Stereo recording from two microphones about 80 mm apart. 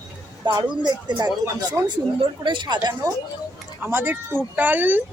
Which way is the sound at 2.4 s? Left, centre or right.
Right.